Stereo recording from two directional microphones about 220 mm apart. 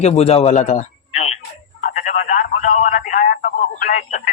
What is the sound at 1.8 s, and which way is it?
Telephone, 35° left (ahead or behind).